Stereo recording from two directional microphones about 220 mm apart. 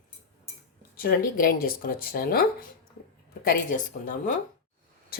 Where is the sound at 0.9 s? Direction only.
40° left (ahead or behind).